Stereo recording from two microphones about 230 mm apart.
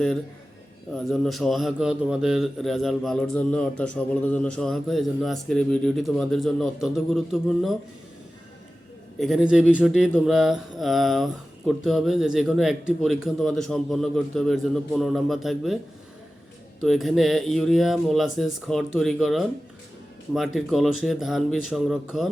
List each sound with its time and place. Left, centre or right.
0.9 s a man's voice: centre
9.1 s a man's voice: centre
16.8 s a man's voice: centre